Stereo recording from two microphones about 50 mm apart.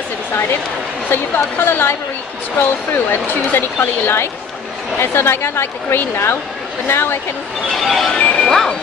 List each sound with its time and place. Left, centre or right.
0.3 s speech: left
7.7 s music: centre
8.1 s speech: left
8.5 s speech: centre